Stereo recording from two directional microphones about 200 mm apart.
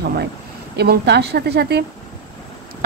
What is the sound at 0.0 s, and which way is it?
Speech, 50° right (ahead or behind).